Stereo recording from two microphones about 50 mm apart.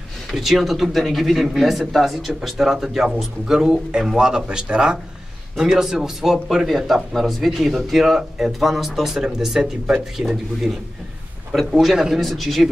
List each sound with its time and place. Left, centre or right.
0.3 s speech: centre
5.6 s speech: centre
10.2 s speech: centre